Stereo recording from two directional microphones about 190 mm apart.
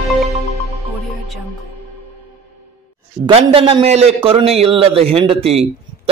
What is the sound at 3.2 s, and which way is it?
A man's voice, 30° right (ahead or behind).